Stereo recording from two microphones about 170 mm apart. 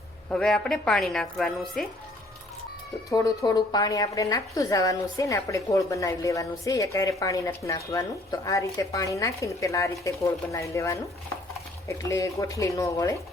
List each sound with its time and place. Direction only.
0.3 s a woman's voice: 5° left (ahead or behind)
3.1 s a woman's voice: 20° left (ahead or behind)